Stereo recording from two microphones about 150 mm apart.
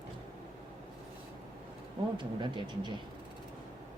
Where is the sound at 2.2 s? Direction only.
30° right (ahead or behind).